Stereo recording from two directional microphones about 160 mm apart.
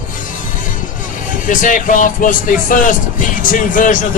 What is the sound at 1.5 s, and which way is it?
Speech, 55° left (ahead or behind).